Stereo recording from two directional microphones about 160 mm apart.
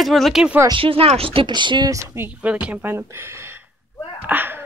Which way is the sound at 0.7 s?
35° right (ahead or behind).